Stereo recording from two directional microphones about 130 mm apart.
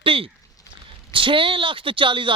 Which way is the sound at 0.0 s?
45° right (ahead or behind).